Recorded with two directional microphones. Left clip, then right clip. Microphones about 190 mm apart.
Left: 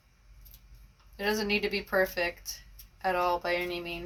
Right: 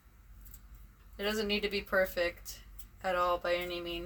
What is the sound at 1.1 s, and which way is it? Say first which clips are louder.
A woman's voice: left 4 dB; 45° right (ahead or behind).